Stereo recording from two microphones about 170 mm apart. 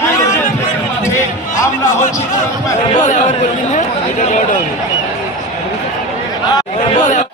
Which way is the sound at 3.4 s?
45° left (ahead or behind).